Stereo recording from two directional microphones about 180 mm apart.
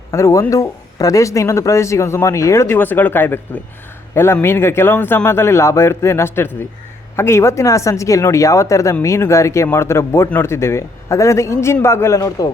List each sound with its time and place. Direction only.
0.1 s speech: 15° left (ahead or behind)